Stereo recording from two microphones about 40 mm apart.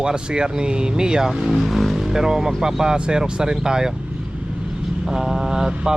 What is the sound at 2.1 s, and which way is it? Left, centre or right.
Speech, centre.